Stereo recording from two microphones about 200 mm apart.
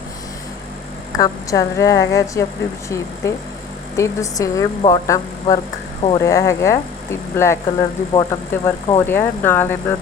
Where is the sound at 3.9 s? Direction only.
15° left (ahead or behind).